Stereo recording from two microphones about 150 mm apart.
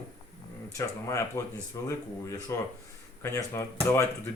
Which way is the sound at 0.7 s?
20° left (ahead or behind).